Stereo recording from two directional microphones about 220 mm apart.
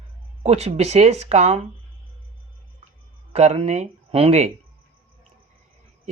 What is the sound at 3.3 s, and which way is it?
Speech, 30° right (ahead or behind).